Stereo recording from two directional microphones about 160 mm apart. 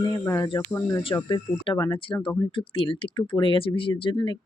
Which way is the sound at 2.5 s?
30° left (ahead or behind).